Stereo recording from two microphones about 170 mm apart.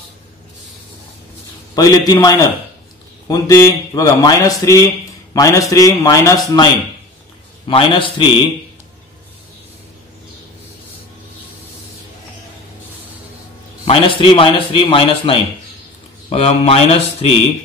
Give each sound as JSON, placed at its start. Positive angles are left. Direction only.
{"t": 1.8, "sound": "a man's voice", "side_deg": 20}
{"t": 13.8, "sound": "a man's voice", "side_deg": 30}